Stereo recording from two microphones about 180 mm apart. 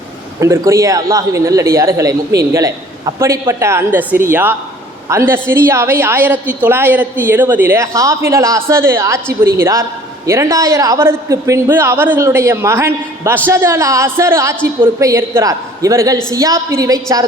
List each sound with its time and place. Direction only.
0.3 s a man's voice: 15° right (ahead or behind)